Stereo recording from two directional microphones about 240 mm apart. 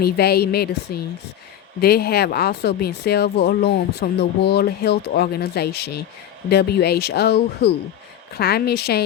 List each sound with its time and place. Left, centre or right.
0.0 s speech: left